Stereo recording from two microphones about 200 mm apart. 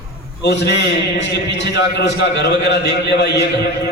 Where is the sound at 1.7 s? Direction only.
60° left (ahead or behind).